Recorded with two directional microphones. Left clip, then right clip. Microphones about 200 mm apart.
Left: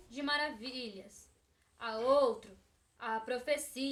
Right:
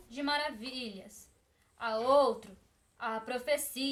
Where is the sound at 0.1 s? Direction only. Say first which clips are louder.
Right 2 dB; 15° right (ahead or behind).